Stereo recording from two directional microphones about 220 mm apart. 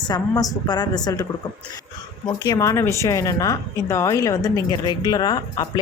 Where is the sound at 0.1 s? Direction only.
20° left (ahead or behind).